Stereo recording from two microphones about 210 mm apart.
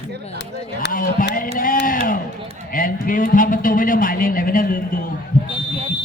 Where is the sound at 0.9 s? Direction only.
40° left (ahead or behind).